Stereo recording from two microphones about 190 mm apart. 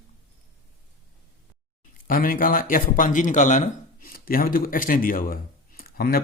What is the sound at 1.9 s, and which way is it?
Speech, 45° left (ahead or behind).